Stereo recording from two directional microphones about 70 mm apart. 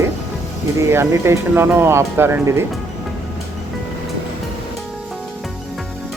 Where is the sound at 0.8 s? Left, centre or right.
Right.